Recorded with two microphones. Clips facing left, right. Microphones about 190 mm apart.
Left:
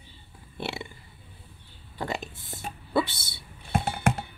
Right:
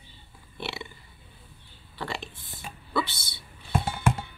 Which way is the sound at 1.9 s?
40° left (ahead or behind).